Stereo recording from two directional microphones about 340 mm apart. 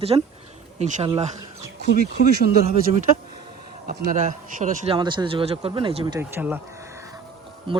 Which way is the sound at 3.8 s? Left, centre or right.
Right.